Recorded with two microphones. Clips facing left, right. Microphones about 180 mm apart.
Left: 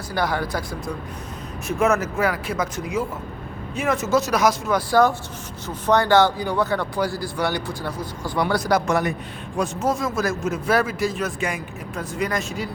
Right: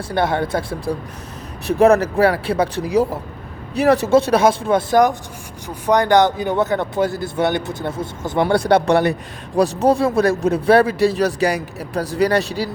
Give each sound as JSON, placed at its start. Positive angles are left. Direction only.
{"t": 0.1, "sound": "a man's voice", "side_deg": -25}